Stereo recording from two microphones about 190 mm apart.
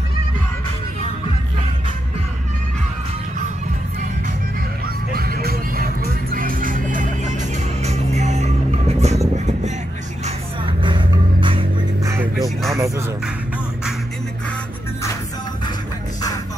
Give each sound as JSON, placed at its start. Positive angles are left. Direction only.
{"t": 4.8, "sound": "music", "side_deg": -55}
{"t": 10.2, "sound": "vehicle", "side_deg": -25}
{"t": 11.4, "sound": "music", "side_deg": -25}
{"t": 12.4, "sound": "music", "side_deg": 0}